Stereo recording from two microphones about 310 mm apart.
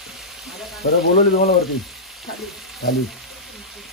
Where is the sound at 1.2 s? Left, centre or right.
Left.